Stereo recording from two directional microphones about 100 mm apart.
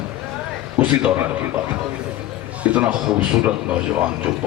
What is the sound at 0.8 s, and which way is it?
Speech, 20° right (ahead or behind).